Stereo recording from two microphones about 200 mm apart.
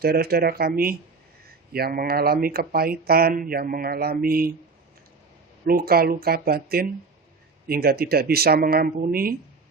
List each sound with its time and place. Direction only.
0.0 s speech: 50° right (ahead or behind)
5.6 s speech: 50° right (ahead or behind)